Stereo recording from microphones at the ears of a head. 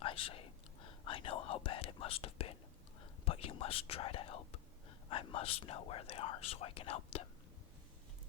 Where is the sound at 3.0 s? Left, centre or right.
Left.